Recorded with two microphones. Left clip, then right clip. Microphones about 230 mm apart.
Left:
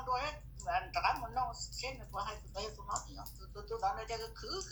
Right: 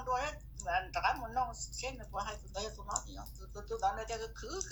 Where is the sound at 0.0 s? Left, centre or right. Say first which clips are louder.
Right 1 dB; right.